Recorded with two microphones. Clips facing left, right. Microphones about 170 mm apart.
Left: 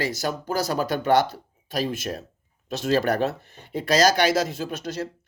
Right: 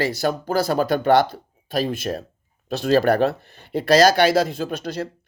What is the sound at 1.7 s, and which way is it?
Speech, 30° right (ahead or behind).